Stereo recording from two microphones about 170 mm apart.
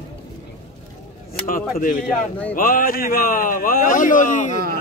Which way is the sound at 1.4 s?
55° left (ahead or behind).